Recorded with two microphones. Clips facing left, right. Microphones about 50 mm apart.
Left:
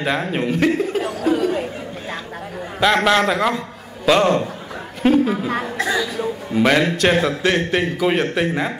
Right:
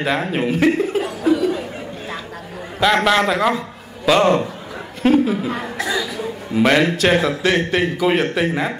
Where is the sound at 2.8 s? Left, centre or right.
Centre.